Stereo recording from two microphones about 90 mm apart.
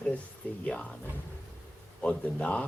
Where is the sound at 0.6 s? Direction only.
15° left (ahead or behind).